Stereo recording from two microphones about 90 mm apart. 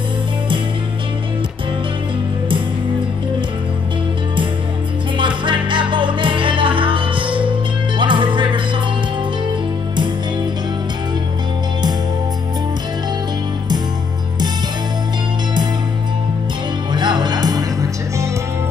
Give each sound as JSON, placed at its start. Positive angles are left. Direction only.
{"t": 5.1, "sound": "music", "side_deg": -65}
{"t": 16.9, "sound": "music", "side_deg": -55}